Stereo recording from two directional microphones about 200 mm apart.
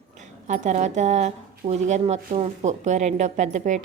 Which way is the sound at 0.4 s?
35° right (ahead or behind).